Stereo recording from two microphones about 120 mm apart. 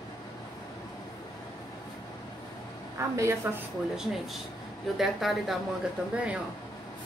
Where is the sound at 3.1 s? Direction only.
25° right (ahead or behind).